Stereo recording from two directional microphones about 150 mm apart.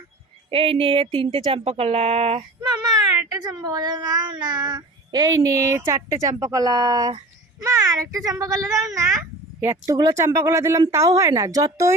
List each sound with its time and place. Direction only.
0.5 s speech: 40° right (ahead or behind)
2.6 s a child's voice: 25° right (ahead or behind)